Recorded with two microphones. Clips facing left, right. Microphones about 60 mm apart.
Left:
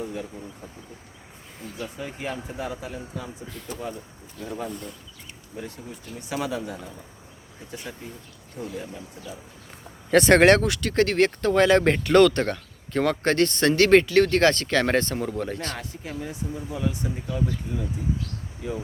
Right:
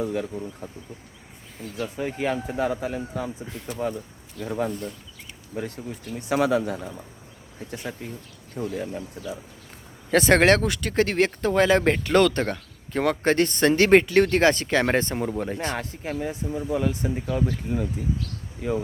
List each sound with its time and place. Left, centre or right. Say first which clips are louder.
0.0 s speech: right 5 dB; right
2.0 s speech: right 8 dB; right
5.5 s speech: right 5 dB; right
8.6 s speech: right 5 dB; right
10.1 s speech: left 2 dB; centre
15.8 s speech: right 5 dB; right
16.9 s speech: right 4 dB; right
17.3 s speech: right 2 dB; right